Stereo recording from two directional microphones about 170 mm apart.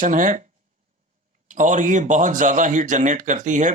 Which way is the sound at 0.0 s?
50° right (ahead or behind).